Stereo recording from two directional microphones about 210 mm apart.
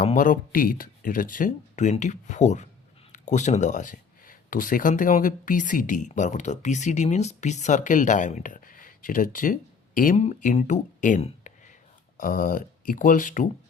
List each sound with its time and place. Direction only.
0.0 s speech: 35° left (ahead or behind)